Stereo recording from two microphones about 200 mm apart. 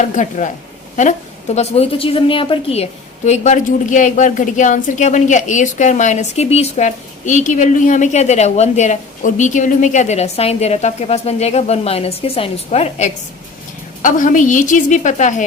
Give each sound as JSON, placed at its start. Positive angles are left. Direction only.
{"t": 0.0, "sound": "a woman's voice", "side_deg": 35}
{"t": 1.5, "sound": "a woman's voice", "side_deg": 30}